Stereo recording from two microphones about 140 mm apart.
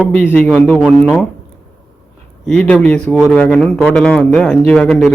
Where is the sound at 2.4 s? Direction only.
5° left (ahead or behind).